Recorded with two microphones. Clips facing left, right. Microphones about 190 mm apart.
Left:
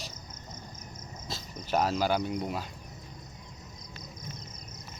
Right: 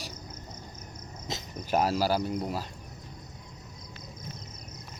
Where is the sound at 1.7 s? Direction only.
10° right (ahead or behind).